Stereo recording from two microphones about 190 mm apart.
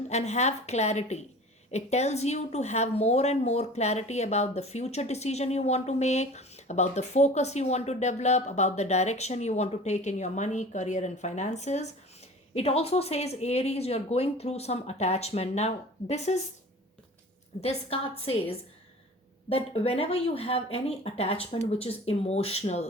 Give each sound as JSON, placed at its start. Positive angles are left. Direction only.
{"t": 0.1, "sound": "a woman's voice", "side_deg": 35}
{"t": 17.6, "sound": "a woman's voice", "side_deg": 35}